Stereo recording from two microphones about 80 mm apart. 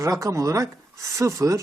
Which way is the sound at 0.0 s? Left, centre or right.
Right.